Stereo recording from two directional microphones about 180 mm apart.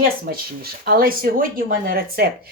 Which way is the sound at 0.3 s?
55° right (ahead or behind).